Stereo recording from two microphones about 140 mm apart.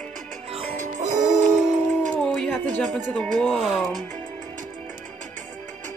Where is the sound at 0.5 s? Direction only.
40° right (ahead or behind).